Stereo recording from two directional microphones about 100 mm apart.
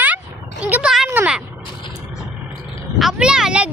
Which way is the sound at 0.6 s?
15° right (ahead or behind).